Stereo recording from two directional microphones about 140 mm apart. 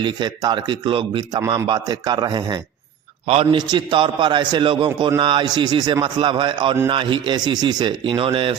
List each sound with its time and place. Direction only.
0.0 s a man's voice: 30° right (ahead or behind)
3.2 s a man's voice: 45° right (ahead or behind)
3.7 s a man's voice: 35° right (ahead or behind)